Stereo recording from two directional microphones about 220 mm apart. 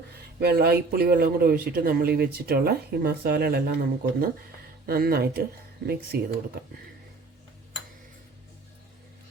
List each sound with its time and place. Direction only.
0.3 s speech: 45° right (ahead or behind)